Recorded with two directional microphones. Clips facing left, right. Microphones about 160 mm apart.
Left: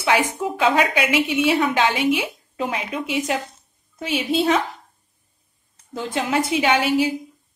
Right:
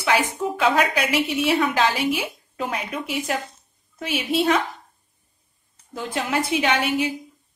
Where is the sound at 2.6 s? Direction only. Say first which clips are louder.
Left 2 dB; centre (ahead or behind).